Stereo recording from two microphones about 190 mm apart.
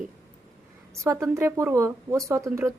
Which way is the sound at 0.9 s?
15° right (ahead or behind).